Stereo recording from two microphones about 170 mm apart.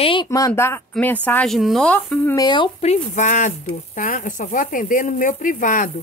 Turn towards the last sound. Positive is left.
turn(degrees=50)  # may be behind; listen again after turning